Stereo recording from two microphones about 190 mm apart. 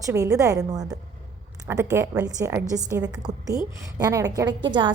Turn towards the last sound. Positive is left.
turn(degrees=-25)  # may be behind; listen again after turning